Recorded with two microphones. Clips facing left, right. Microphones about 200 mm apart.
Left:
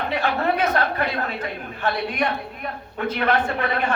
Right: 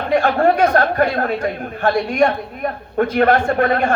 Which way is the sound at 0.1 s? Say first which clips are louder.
Right 10 dB; 50° right (ahead or behind).